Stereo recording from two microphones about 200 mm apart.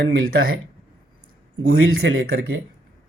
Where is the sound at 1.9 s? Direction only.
50° right (ahead or behind).